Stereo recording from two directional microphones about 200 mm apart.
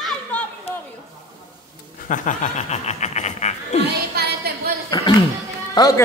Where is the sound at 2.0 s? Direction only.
40° left (ahead or behind).